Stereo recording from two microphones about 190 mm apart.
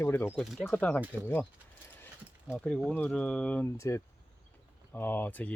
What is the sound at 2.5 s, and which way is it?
Speech, 5° left (ahead or behind).